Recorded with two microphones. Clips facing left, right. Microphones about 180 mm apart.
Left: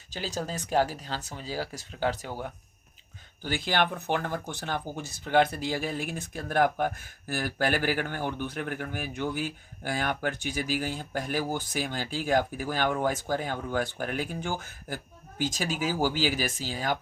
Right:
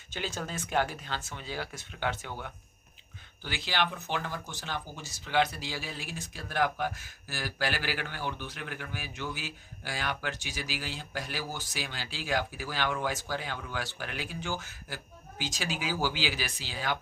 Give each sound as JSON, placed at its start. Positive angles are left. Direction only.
{"t": 0.1, "sound": "speech", "side_deg": 35}
{"t": 3.4, "sound": "speech", "side_deg": 50}